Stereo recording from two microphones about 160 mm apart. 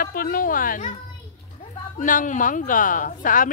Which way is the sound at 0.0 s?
65° left (ahead or behind).